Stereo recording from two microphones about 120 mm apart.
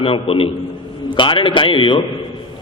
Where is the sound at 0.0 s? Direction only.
50° left (ahead or behind).